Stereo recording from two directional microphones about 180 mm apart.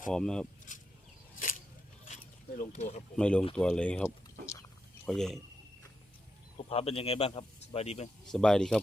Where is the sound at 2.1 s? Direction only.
40° left (ahead or behind).